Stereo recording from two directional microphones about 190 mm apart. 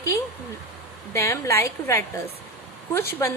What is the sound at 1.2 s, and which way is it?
Speech, 15° left (ahead or behind).